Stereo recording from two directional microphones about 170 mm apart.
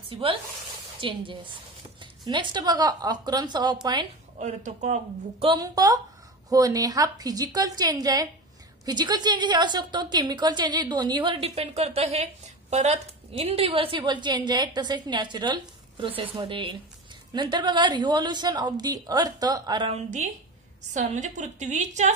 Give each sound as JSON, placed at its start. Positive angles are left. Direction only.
{"t": 0.1, "sound": "a man's voice", "side_deg": -30}
{"t": 4.4, "sound": "a man's voice", "side_deg": -45}
{"t": 5.5, "sound": "a woman's voice", "side_deg": -20}
{"t": 19.9, "sound": "a woman's voice", "side_deg": -45}